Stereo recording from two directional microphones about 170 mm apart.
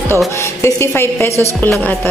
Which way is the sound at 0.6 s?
15° left (ahead or behind).